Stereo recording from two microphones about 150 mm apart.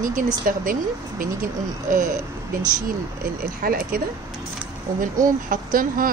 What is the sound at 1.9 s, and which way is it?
Speech, 70° right (ahead or behind).